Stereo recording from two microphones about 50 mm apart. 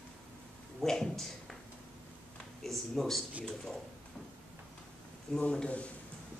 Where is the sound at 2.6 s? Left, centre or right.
Centre.